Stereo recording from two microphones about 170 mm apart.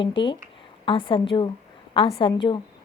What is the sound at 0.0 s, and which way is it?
A woman's voice, 30° left (ahead or behind).